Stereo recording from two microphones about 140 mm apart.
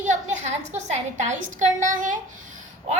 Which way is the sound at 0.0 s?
60° right (ahead or behind).